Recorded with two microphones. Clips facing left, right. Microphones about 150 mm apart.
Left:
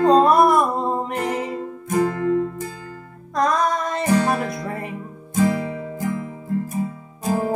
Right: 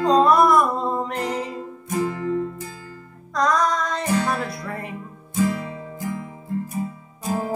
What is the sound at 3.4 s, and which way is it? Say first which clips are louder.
Female singing: left 1 dB; 25° left (ahead or behind).